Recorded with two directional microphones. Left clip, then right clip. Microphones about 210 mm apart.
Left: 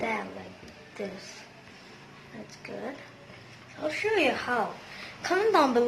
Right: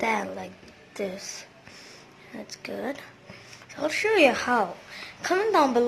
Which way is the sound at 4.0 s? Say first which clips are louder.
Right 6 dB; 55° right (ahead or behind).